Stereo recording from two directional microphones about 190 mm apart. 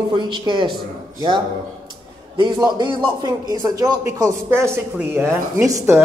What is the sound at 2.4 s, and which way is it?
A woman's voice, 25° right (ahead or behind).